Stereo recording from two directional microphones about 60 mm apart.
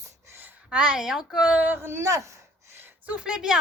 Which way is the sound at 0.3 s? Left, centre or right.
Right.